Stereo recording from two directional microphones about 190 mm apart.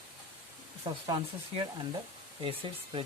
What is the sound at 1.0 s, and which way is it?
Speech, 20° right (ahead or behind).